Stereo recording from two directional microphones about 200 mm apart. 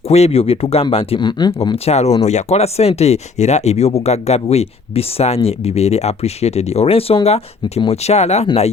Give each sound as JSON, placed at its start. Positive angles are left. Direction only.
{"t": 0.1, "sound": "speech", "side_deg": 30}